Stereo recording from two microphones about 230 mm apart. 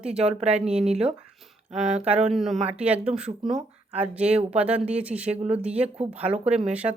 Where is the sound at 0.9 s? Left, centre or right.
Right.